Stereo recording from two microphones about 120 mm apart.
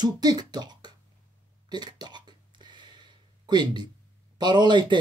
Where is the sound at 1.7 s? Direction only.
35° right (ahead or behind).